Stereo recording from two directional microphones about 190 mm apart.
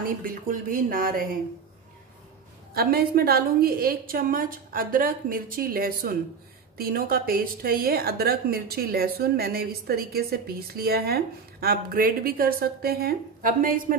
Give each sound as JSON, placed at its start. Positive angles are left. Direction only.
{"t": 0.0, "sound": "a woman's voice", "side_deg": -50}
{"t": 2.7, "sound": "a woman's voice", "side_deg": -55}